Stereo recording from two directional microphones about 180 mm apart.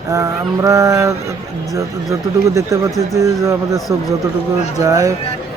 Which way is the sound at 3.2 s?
15° right (ahead or behind).